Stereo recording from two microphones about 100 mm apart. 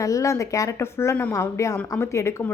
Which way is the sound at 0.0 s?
30° left (ahead or behind).